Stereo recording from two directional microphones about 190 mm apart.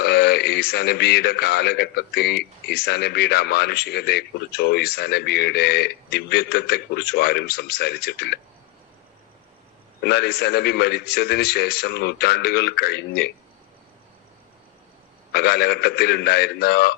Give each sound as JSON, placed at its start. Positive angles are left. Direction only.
{"t": 0.0, "sound": "a man's voice", "side_deg": 60}
{"t": 10.0, "sound": "a man's voice", "side_deg": 60}
{"t": 15.3, "sound": "a man's voice", "side_deg": 60}